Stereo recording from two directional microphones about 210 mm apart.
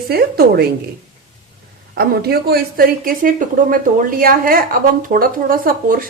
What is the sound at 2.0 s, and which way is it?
Speech, 45° right (ahead or behind).